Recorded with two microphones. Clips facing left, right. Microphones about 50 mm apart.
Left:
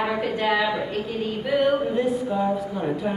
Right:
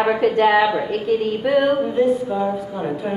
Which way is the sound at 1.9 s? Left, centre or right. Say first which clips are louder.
Right 5 dB; centre.